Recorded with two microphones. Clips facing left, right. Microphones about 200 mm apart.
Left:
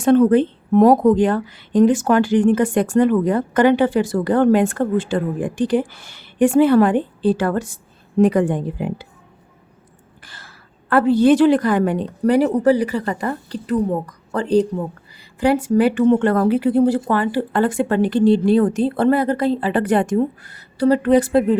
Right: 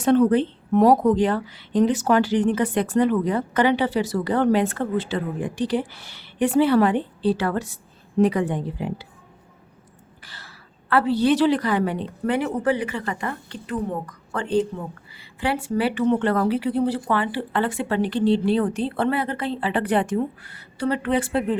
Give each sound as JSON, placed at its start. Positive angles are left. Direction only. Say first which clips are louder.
{"t": 0.0, "sound": "speech", "louder": "left 4 dB", "side_deg": 50}
{"t": 10.2, "sound": "a woman's voice", "louder": "left 1 dB", "side_deg": 50}